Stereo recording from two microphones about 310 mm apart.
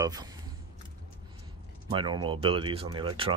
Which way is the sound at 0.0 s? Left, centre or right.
Centre.